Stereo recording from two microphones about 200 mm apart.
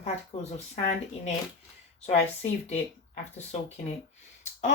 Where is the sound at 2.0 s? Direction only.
30° left (ahead or behind).